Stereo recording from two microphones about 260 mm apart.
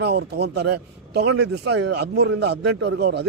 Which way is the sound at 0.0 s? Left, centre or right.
Right.